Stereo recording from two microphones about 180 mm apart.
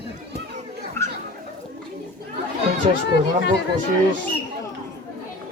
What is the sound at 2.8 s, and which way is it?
Chatter, 30° right (ahead or behind).